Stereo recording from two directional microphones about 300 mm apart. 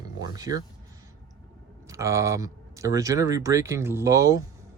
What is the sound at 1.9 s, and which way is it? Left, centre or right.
Speech, centre.